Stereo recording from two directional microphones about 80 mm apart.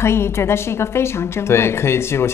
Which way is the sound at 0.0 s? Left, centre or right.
Left.